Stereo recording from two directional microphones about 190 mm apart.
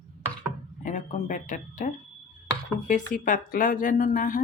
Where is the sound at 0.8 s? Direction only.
40° left (ahead or behind).